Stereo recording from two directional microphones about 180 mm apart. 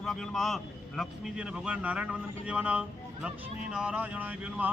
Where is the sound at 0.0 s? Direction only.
Centre (ahead or behind).